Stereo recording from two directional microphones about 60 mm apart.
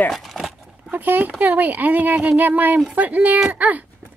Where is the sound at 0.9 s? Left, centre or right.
Right.